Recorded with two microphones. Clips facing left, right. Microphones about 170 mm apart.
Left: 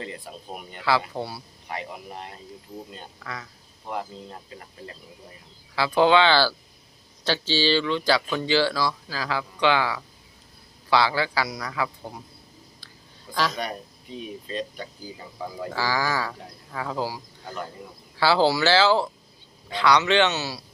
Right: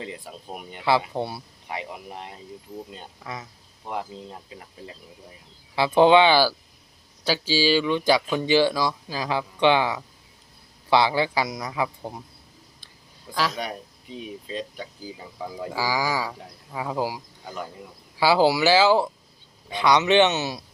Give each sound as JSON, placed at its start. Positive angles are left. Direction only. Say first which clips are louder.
{"t": 0.0, "sound": "a man's voice", "louder": "even", "side_deg": -10}
{"t": 5.7, "sound": "a man's voice", "louder": "right 3 dB", "side_deg": -20}
{"t": 13.3, "sound": "a man's voice", "louder": "even", "side_deg": -5}